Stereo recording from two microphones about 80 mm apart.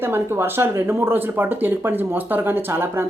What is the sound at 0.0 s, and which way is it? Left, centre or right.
Speech, right.